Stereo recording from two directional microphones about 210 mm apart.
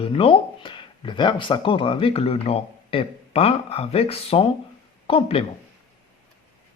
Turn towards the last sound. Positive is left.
turn(degrees=25)  # may be behind; listen again after turning